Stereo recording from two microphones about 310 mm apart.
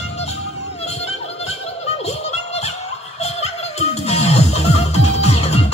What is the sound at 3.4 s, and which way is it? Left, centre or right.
Music, centre.